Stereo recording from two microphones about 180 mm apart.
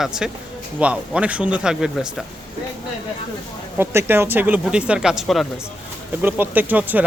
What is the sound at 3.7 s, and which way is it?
Speech, 10° right (ahead or behind).